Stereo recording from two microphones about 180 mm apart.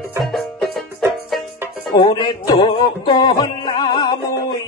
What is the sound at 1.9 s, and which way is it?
Music, 25° left (ahead or behind).